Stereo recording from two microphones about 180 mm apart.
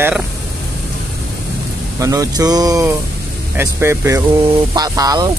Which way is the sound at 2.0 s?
20° right (ahead or behind).